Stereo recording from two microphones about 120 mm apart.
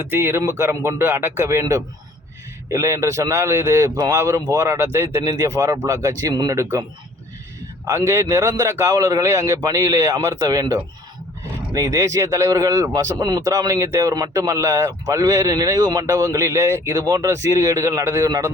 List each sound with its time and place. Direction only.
0.0 s speech: 20° right (ahead or behind)
7.9 s a man's voice: 25° right (ahead or behind)